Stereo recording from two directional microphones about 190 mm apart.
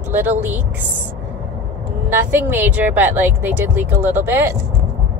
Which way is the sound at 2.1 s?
10° right (ahead or behind).